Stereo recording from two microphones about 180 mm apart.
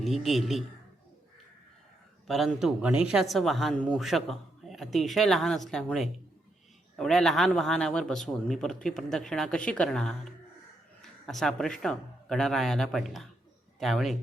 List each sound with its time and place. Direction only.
0.0 s speech: centre (ahead or behind)
2.2 s a man's voice: centre (ahead or behind)